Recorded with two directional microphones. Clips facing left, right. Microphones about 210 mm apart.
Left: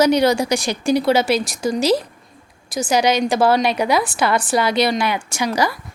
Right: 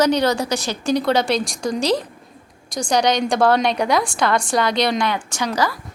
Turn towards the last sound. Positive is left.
turn(degrees=10)  # may be behind; listen again after turning